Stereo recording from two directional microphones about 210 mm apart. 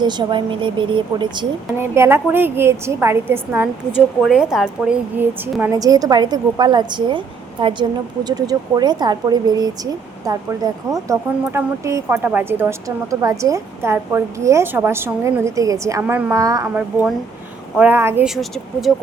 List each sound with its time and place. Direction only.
0.0 s a woman's voice: 20° right (ahead or behind)
1.8 s a woman's voice: 10° right (ahead or behind)
18.3 s speech: centre (ahead or behind)